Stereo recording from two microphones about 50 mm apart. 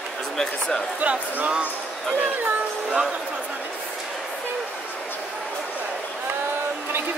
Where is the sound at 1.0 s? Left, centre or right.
Right.